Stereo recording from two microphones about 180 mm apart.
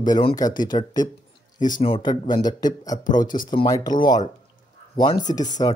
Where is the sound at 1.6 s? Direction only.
45° left (ahead or behind).